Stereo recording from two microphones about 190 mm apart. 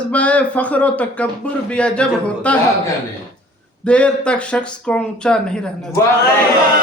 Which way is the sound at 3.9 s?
5° left (ahead or behind).